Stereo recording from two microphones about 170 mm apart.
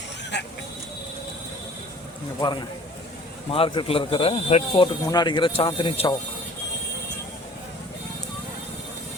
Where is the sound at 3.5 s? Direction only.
30° left (ahead or behind).